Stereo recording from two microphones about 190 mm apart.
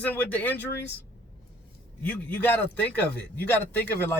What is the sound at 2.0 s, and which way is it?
Speech, 10° left (ahead or behind).